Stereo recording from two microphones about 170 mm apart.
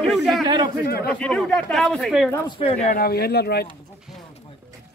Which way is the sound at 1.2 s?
5° left (ahead or behind).